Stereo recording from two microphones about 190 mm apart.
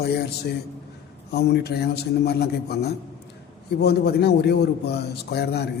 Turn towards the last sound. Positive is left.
turn(degrees=60)  # may be behind; listen again after turning